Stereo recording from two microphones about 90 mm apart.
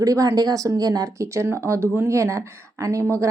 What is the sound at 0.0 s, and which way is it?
Speech, 40° right (ahead or behind).